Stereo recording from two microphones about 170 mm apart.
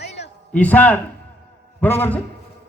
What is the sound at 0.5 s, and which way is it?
A man's voice, 10° left (ahead or behind).